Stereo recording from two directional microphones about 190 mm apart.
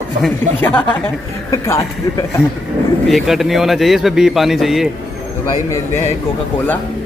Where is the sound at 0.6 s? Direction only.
10° left (ahead or behind).